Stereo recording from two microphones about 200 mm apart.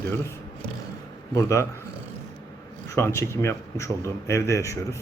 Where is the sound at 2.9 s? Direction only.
15° left (ahead or behind).